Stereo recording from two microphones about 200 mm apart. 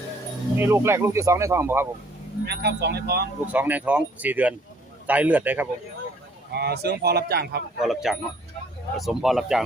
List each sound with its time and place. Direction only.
0.6 s speech: 15° right (ahead or behind)
2.5 s speech: 55° right (ahead or behind)
3.4 s speech: 10° right (ahead or behind)
6.5 s speech: 55° right (ahead or behind)
7.8 s speech: centre (ahead or behind)